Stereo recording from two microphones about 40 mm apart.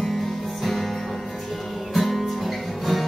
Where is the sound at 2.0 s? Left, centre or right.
Centre.